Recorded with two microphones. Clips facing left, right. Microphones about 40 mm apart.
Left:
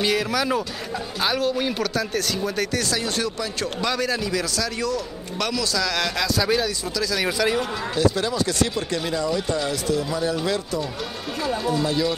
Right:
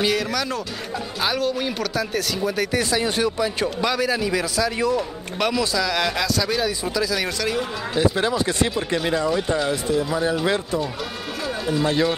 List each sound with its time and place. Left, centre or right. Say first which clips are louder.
0.0 s speech: even; centre
2.7 s speech: right 3 dB; centre
3.9 s speech: right 2 dB; centre
6.3 s speech: left 2 dB; centre
6.6 s speech: right 2 dB; centre
7.2 s speech: left 2 dB; centre
7.9 s speech: right 2 dB; right
11.4 s run: left 1 dB; centre
11.8 s speech: right 6 dB; right